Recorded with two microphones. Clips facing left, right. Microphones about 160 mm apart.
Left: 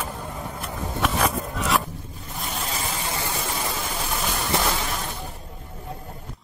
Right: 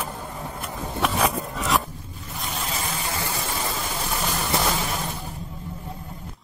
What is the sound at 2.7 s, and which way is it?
Vehicle, 25° left (ahead or behind).